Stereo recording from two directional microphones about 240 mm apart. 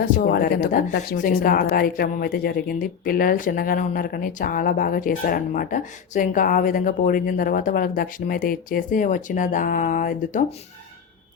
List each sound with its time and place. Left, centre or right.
0.0 s speech: left